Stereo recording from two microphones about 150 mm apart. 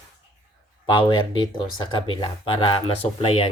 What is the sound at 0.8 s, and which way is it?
Speech, 35° left (ahead or behind).